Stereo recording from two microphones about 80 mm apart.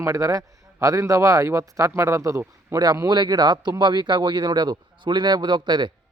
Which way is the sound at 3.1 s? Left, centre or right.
Right.